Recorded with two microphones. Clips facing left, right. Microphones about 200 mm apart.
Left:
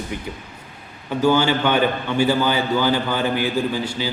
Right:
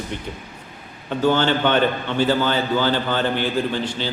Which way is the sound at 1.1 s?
10° left (ahead or behind).